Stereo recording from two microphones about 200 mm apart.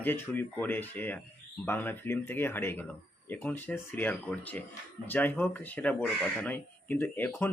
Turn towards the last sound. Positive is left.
turn(degrees=10)  # may be behind; listen again after turning